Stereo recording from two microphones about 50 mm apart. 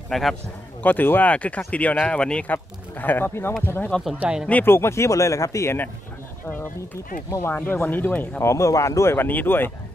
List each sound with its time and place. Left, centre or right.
0.1 s a man's voice: centre
0.8 s speech: left
1.3 s speech: left
2.1 s speech: centre
2.4 s speech: left
4.2 s speech: right
4.6 s speech: left
7.2 s speech: left
7.7 s speech: left
8.4 s speech: left
9.1 s speech: left